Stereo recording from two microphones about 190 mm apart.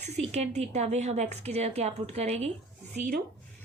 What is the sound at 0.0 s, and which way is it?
A woman's voice, 35° right (ahead or behind).